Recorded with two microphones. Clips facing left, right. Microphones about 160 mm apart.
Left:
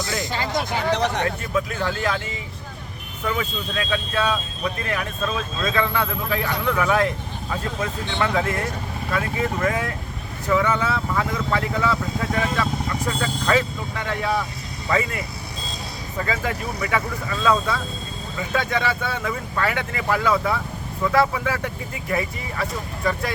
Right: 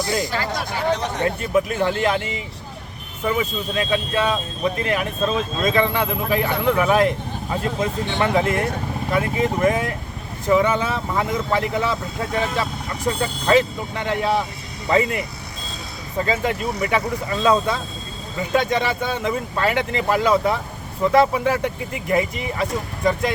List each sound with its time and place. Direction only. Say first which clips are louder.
0.2 s speech: right 1 dB; 20° left (ahead or behind)
0.9 s speech: left 4 dB; 70° left (ahead or behind)
1.4 s speech: right 5 dB; 20° right (ahead or behind)